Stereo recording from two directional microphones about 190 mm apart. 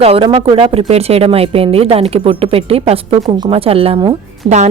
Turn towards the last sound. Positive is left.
turn(degrees=-25)  # may be behind; listen again after turning